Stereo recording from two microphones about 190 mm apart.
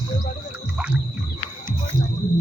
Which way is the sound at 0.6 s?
5° right (ahead or behind).